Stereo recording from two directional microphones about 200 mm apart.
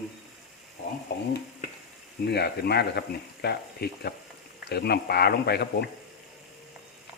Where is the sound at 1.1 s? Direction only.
50° left (ahead or behind).